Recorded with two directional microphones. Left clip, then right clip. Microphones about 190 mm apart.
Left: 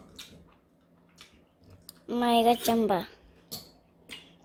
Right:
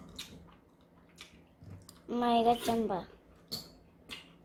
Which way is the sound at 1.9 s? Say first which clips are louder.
Left 4 dB; 25° left (ahead or behind).